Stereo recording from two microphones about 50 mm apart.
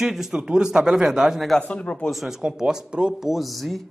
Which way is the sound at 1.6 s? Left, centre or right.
Left.